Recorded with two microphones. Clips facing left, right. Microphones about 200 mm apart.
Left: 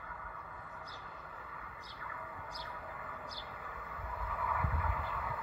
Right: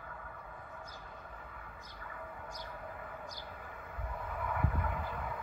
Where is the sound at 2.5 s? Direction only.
45° right (ahead or behind).